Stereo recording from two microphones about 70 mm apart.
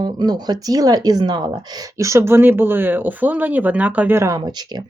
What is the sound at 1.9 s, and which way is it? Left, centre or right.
Speech, right.